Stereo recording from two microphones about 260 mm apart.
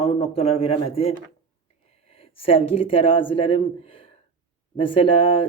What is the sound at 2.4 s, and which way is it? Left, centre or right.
Speech, left.